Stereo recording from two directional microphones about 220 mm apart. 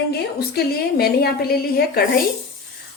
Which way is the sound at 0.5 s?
45° left (ahead or behind).